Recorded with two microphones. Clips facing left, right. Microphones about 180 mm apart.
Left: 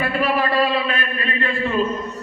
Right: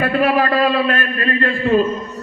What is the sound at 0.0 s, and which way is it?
A man's voice, 45° right (ahead or behind).